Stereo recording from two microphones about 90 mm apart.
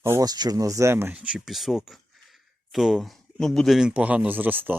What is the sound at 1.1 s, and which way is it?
Speech, 10° right (ahead or behind).